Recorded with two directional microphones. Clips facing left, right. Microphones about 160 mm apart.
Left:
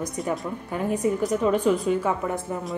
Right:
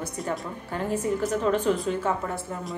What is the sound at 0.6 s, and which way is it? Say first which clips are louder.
Speech: left 2 dB; 15° left (ahead or behind).